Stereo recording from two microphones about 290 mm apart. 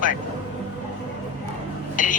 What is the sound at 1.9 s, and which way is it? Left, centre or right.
Speech, left.